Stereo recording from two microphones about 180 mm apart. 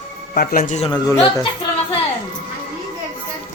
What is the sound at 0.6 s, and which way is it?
Speech, 35° left (ahead or behind).